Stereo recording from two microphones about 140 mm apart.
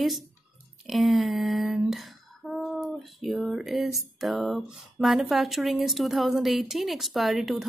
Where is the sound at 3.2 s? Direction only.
Centre (ahead or behind).